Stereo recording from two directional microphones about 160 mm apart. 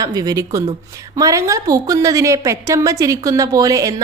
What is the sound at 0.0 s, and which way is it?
A woman's voice, 25° right (ahead or behind).